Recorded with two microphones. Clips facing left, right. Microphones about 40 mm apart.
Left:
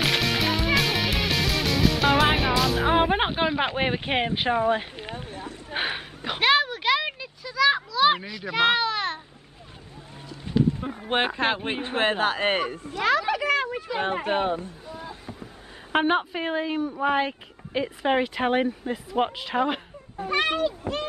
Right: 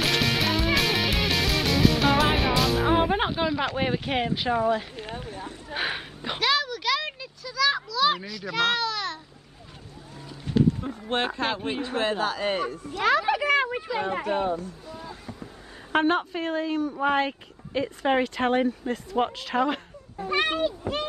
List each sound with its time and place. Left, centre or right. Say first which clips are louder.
0.0 s music: even; centre
2.9 s speech: left 1 dB; left
4.9 s speech: even; left
5.9 s speech: left 1 dB; centre
6.4 s a sound: left 4 dB; left
8.2 s speech: left 3 dB; left
10.4 s run: right 1 dB; centre
11.0 s speech: left 2 dB; left
13.0 s speech: right 1 dB; centre
14.2 s speech: left 1 dB; left
14.9 s speech: left 1 dB; centre
16.9 s speech: left 1 dB; centre